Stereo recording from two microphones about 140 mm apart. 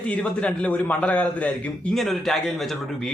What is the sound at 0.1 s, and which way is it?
A man's voice, 5° left (ahead or behind).